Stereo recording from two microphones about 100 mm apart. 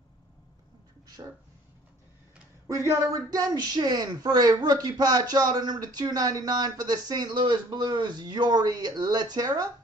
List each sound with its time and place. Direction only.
1.2 s speech: 50° right (ahead or behind)
2.7 s speech: 30° right (ahead or behind)